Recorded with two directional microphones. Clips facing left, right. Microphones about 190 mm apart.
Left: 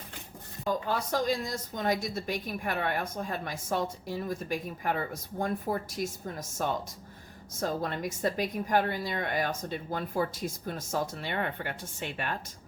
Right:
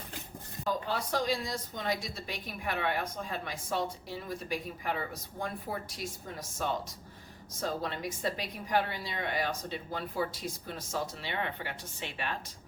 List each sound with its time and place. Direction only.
0.7 s a woman's voice: 45° left (ahead or behind)